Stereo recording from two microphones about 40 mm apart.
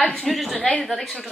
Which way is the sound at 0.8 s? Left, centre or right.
Centre.